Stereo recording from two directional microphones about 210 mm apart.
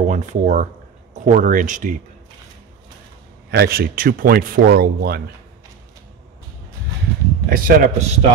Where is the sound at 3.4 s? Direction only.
50° right (ahead or behind).